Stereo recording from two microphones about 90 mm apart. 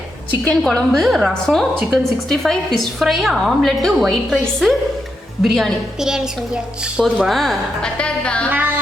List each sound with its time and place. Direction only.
0.4 s a woman's voice: 5° left (ahead or behind)
8.4 s music: 20° right (ahead or behind)